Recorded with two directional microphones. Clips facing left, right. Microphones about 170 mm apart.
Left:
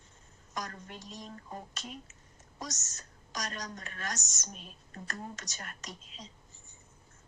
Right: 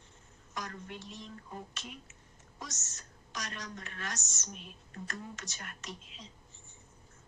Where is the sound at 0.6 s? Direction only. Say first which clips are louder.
Left 1 dB; 40° left (ahead or behind).